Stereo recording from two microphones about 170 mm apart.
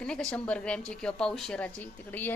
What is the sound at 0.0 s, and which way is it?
Speech, 5° left (ahead or behind).